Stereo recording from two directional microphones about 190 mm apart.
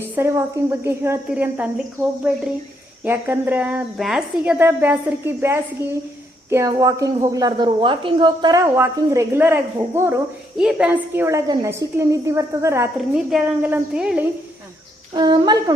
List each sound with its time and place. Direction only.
0.0 s a woman's voice: 15° right (ahead or behind)
15.1 s speech: 25° right (ahead or behind)